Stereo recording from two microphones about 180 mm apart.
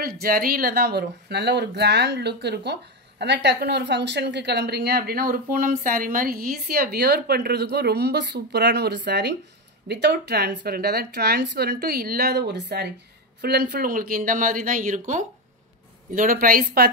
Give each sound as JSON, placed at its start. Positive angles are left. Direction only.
{"t": 0.0, "sound": "a woman's voice", "side_deg": -55}